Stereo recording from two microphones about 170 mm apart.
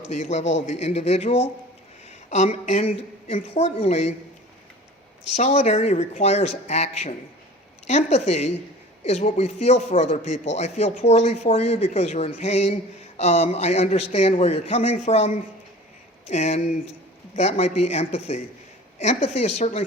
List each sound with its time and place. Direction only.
0.2 s speech: 40° left (ahead or behind)
5.4 s a man's voice: 40° left (ahead or behind)